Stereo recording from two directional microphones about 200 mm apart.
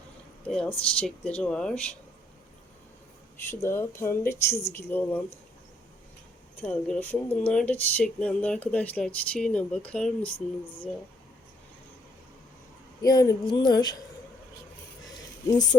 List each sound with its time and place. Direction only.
0.4 s speech: 5° left (ahead or behind)
3.5 s speech: 10° left (ahead or behind)
6.6 s speech: 5° left (ahead or behind)
13.0 s speech: 20° left (ahead or behind)
15.4 s speech: 20° left (ahead or behind)